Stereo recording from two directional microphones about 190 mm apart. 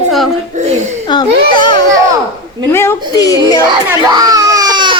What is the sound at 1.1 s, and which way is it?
A child's voice, 25° left (ahead or behind).